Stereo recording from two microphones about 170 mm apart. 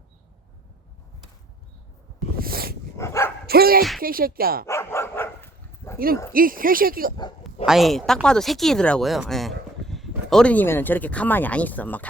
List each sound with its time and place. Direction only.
2.4 s dog: 60° right (ahead or behind)
3.0 s dog: 15° left (ahead or behind)
3.4 s dog: 65° right (ahead or behind)
4.0 s speech: 60° right (ahead or behind)
4.6 s dog: 15° left (ahead or behind)
6.3 s speech: 55° right (ahead or behind)
7.4 s speech: centre (ahead or behind)